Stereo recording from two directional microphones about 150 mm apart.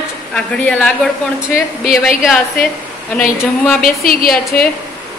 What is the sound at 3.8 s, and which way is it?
Speech, 75° left (ahead or behind).